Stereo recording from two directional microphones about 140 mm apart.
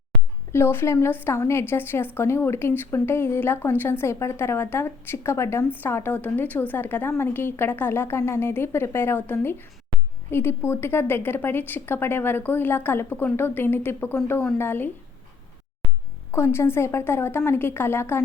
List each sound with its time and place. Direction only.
0.5 s speech: 15° left (ahead or behind)
16.3 s speech: 20° left (ahead or behind)